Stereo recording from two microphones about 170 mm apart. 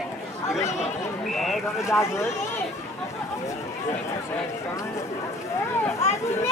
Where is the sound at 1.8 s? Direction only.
15° left (ahead or behind).